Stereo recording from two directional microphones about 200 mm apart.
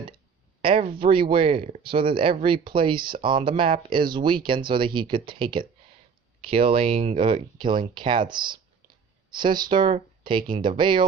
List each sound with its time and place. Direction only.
0.6 s speech: 25° right (ahead or behind)